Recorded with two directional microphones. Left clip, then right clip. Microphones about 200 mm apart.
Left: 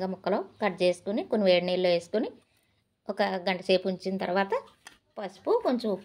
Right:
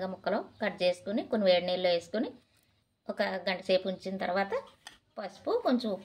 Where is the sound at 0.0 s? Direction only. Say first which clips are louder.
Left 3 dB; 30° left (ahead or behind).